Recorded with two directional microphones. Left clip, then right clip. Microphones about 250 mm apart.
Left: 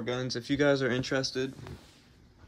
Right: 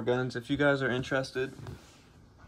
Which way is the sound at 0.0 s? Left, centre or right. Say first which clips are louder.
Right 3 dB; centre.